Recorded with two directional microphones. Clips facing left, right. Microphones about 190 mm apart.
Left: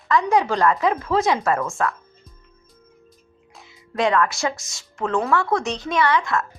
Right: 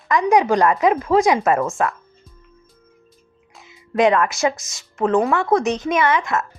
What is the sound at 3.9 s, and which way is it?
A woman's voice, 20° right (ahead or behind).